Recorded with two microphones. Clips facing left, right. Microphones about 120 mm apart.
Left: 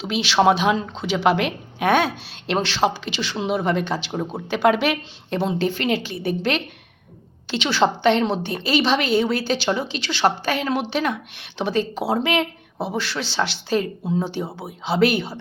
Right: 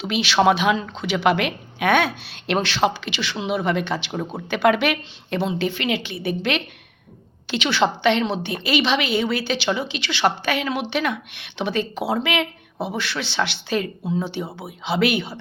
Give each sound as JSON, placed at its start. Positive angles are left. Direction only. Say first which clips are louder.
{"t": 0.0, "sound": "speech", "louder": "even", "side_deg": 30}